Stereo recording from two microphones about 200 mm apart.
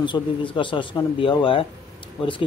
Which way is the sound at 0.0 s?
25° left (ahead or behind).